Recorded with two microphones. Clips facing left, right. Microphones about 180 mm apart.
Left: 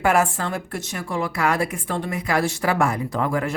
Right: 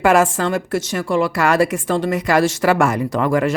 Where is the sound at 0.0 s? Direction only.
90° right.